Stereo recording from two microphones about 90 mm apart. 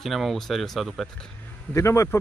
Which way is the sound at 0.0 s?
Centre (ahead or behind).